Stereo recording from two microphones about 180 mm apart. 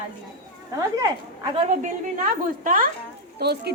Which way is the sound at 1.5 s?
40° right (ahead or behind).